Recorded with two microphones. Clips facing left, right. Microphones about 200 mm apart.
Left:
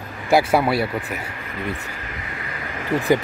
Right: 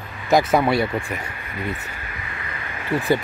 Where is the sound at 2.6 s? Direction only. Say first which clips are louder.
Left 1 dB; 45° left (ahead or behind).